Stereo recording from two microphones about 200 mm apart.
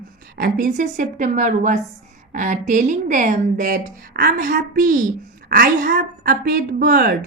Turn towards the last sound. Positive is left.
turn(degrees=-45)  # may be behind; listen again after turning